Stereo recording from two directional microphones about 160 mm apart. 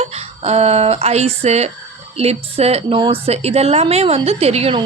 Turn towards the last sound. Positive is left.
turn(degrees=-40)  # may be behind; listen again after turning